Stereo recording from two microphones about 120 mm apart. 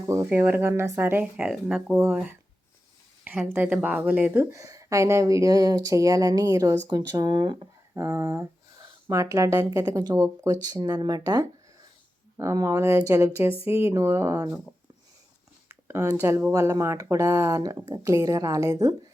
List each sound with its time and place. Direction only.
0.1 s speech: 20° right (ahead or behind)
15.9 s speech: 25° right (ahead or behind)